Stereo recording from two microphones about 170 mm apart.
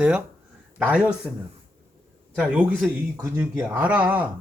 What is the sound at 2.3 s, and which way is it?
Speech, 5° right (ahead or behind).